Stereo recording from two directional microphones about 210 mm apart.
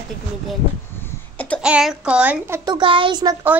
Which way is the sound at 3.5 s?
5° right (ahead or behind).